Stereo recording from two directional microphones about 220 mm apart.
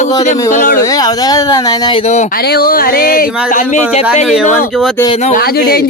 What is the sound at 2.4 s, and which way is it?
Speech, 45° left (ahead or behind).